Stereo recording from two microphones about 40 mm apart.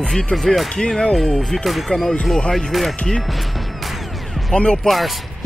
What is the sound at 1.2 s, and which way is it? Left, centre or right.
Speech, centre.